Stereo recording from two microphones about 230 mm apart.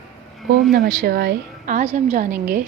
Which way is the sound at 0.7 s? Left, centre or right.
Right.